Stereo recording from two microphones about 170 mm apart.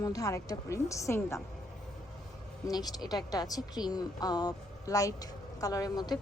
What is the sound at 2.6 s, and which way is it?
A woman's voice, 25° left (ahead or behind).